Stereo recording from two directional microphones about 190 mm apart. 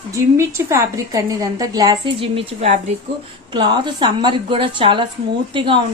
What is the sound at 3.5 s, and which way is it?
A woman's voice, 25° right (ahead or behind).